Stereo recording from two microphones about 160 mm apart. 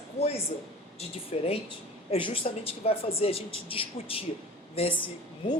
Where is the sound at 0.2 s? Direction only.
40° left (ahead or behind).